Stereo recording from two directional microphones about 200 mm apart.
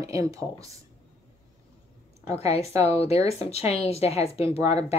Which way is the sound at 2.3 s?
30° left (ahead or behind).